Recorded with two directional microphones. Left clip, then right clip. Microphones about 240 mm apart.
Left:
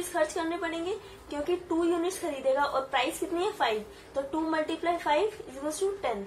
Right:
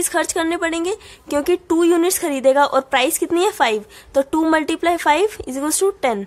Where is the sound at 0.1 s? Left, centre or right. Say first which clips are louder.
Right 8 dB; right.